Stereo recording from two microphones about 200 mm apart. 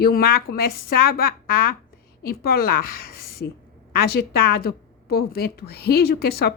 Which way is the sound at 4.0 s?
50° left (ahead or behind).